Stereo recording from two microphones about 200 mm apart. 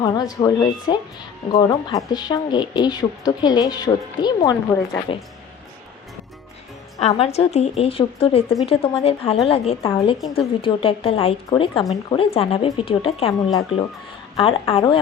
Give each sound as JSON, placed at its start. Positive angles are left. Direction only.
{"t": 0.0, "sound": "a woman's voice", "side_deg": 20}
{"t": 7.0, "sound": "a woman's voice", "side_deg": 30}
{"t": 13.5, "sound": "speech", "side_deg": 20}
{"t": 14.3, "sound": "a woman's voice", "side_deg": 30}